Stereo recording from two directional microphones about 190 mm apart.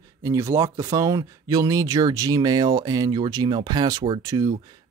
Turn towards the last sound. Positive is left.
turn(degrees=-20)  # may be behind; listen again after turning